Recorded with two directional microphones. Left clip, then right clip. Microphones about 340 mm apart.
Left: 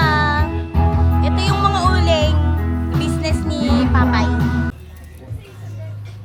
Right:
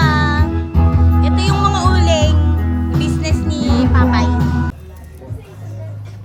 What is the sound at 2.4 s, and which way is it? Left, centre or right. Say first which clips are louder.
Music: right 2 dB; left.